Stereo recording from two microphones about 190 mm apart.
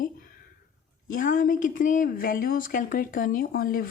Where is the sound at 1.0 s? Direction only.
45° left (ahead or behind).